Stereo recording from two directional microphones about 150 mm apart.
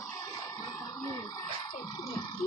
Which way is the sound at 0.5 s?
25° left (ahead or behind).